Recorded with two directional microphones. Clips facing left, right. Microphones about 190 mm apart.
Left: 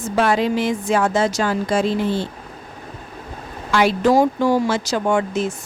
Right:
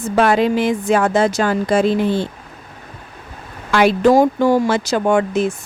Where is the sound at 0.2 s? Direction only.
55° right (ahead or behind).